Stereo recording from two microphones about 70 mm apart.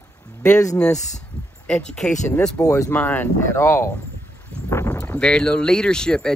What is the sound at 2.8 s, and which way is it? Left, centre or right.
Speech, left.